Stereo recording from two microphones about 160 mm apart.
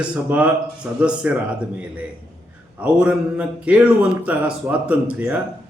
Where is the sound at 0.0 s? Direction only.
10° right (ahead or behind).